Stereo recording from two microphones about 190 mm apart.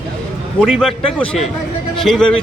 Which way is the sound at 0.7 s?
Centre (ahead or behind).